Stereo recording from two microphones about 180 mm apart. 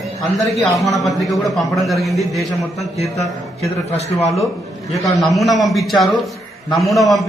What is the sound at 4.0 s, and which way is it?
Speech, 35° left (ahead or behind).